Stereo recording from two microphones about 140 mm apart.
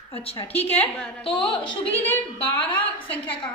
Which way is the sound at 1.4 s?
35° left (ahead or behind).